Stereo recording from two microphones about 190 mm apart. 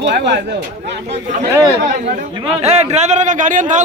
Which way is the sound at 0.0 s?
65° right (ahead or behind).